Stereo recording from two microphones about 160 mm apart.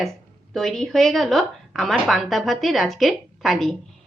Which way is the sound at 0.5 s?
Centre (ahead or behind).